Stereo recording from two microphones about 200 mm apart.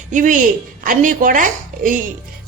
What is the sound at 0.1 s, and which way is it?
Speech, 40° right (ahead or behind).